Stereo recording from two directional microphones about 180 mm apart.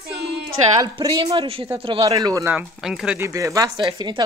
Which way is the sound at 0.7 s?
20° right (ahead or behind).